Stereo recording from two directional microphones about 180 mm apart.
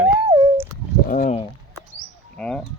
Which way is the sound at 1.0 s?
45° left (ahead or behind).